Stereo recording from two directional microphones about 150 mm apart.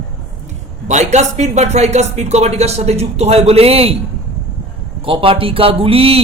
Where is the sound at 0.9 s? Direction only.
50° right (ahead or behind).